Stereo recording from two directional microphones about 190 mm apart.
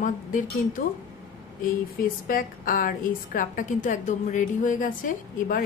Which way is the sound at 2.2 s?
45° left (ahead or behind).